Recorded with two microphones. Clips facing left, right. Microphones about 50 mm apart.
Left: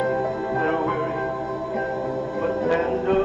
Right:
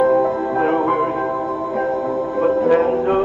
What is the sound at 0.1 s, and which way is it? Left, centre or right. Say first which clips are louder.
Music: right 7 dB; centre.